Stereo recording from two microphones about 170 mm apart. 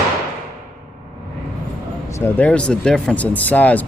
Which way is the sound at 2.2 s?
10° left (ahead or behind).